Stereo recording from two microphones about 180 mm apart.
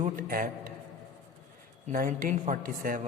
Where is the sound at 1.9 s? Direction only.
50° right (ahead or behind).